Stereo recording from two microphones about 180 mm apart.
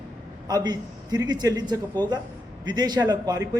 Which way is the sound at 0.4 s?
20° right (ahead or behind).